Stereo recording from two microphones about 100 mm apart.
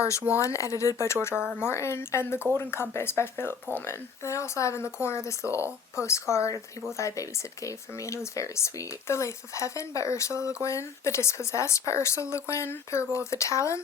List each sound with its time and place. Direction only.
0.3 s speech: 30° left (ahead or behind)
1.3 s speech: 10° right (ahead or behind)
1.6 s speech: 25° left (ahead or behind)